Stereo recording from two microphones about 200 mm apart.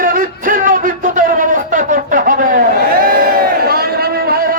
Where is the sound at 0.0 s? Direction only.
45° right (ahead or behind).